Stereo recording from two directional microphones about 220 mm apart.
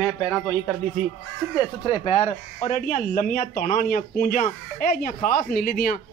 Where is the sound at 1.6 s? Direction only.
20° left (ahead or behind).